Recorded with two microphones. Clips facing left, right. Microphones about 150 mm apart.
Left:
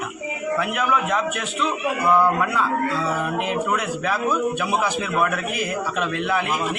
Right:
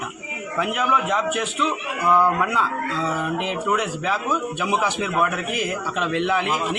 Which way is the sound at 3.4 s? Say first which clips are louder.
Even; 20° right (ahead or behind).